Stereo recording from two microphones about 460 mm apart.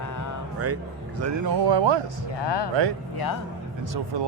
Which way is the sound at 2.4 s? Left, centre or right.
Left.